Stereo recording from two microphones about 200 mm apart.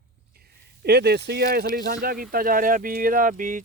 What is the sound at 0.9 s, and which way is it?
Speech, 55° right (ahead or behind).